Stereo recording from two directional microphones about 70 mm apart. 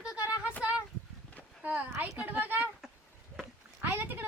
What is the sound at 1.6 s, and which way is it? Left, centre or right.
A child's voice, right.